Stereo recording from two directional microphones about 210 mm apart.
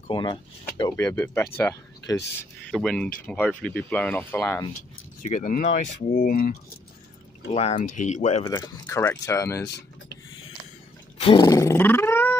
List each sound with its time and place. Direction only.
0.1 s speech: 20° left (ahead or behind)
5.2 s speech: 35° left (ahead or behind)
8.5 s speech: 15° left (ahead or behind)
11.1 s speech: 25° left (ahead or behind)